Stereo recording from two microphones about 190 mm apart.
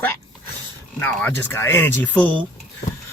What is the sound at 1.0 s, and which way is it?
Speech, 10° left (ahead or behind).